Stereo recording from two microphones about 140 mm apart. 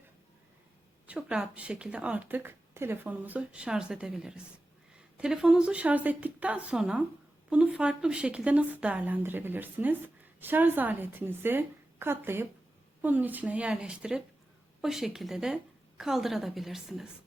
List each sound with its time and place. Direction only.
1.0 s a woman's voice: 10° right (ahead or behind)